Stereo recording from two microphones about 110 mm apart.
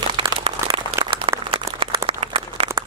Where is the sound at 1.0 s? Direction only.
60° right (ahead or behind).